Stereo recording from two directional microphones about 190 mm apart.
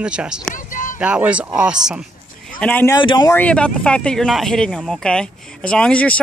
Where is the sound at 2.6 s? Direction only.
10° left (ahead or behind).